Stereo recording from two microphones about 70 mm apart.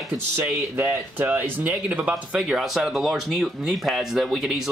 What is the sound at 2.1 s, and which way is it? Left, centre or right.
Speech, centre.